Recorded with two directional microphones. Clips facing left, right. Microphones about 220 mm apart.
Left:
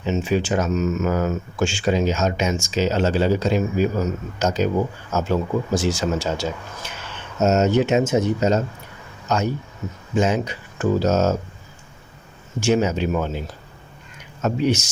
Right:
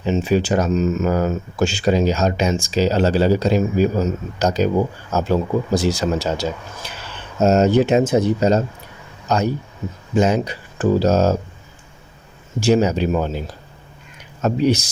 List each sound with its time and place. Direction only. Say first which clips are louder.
0.0 s speech: right 3 dB; 35° right (ahead or behind)
12.5 s speech: right 3 dB; 35° right (ahead or behind)
14.4 s speech: right 3 dB; 35° right (ahead or behind)